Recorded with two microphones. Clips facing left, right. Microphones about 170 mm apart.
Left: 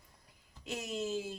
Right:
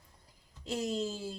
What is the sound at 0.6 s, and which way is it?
Speech, 35° right (ahead or behind).